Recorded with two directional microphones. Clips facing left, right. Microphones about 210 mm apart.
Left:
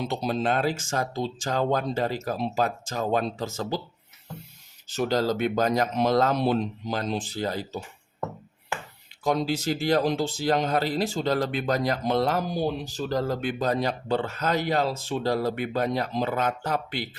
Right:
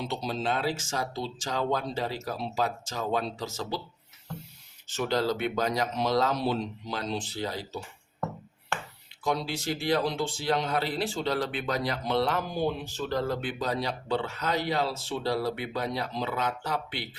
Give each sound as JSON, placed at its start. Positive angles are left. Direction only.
{"t": 0.0, "sound": "speech", "side_deg": 50}
{"t": 4.9, "sound": "speech", "side_deg": 40}
{"t": 9.2, "sound": "speech", "side_deg": 45}